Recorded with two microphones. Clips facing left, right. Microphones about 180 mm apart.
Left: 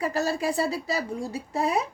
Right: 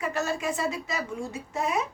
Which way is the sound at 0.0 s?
35° left (ahead or behind).